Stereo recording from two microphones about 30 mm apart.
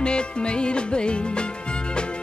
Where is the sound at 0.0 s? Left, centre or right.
Left.